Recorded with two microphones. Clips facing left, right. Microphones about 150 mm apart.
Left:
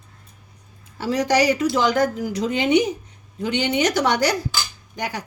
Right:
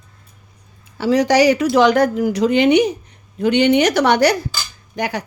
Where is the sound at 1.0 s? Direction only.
90° right.